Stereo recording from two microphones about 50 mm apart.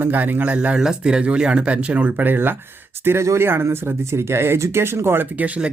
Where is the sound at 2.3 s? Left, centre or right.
Right.